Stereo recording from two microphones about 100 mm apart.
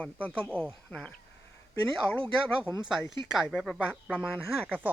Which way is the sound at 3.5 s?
Centre (ahead or behind).